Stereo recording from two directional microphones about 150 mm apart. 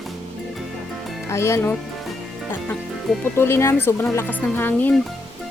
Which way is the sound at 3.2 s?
15° left (ahead or behind).